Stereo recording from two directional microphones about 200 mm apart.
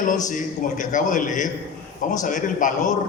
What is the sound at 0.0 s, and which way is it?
A man's voice, 40° left (ahead or behind).